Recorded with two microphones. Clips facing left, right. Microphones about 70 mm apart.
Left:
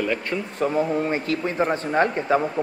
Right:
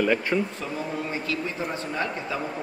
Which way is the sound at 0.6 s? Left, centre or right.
Left.